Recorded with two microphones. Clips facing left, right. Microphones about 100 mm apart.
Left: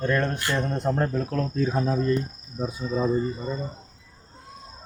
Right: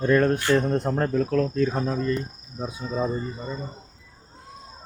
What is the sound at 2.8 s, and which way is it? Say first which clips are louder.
Cricket: left 1 dB; 5° right (ahead or behind).